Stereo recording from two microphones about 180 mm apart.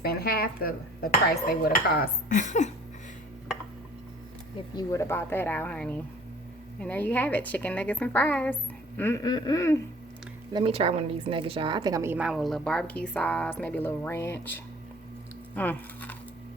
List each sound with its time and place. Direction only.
0.0 s speech: 60° left (ahead or behind); by 2.7 s 40° left (ahead or behind)
4.8 s a woman's voice: 15° left (ahead or behind)
10.5 s a woman's voice: 30° right (ahead or behind); by 16.1 s 10° left (ahead or behind)